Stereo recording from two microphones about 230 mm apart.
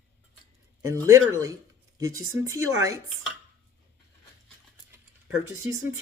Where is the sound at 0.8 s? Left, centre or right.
Centre.